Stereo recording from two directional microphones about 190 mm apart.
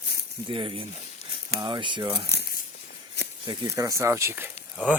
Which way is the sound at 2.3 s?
55° left (ahead or behind).